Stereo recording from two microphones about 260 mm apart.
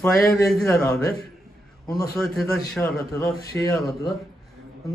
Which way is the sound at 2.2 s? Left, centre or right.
Centre.